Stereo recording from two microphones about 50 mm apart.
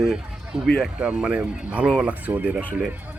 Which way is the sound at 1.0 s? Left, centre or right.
Right.